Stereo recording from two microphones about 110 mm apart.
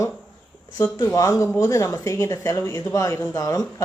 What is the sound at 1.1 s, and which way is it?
Speech, 30° left (ahead or behind).